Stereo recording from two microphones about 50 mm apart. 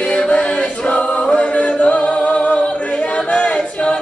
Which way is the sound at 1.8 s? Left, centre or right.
Left.